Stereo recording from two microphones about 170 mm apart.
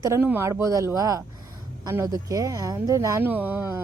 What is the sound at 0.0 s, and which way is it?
Speech, 15° right (ahead or behind).